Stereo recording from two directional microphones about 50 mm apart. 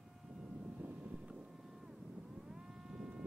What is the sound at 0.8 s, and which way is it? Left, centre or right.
Vehicle, right.